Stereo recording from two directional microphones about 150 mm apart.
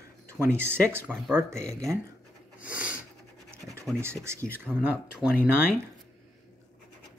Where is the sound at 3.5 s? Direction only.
20° right (ahead or behind).